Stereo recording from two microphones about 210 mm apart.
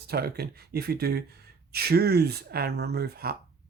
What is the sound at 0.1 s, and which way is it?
Speech, 50° right (ahead or behind).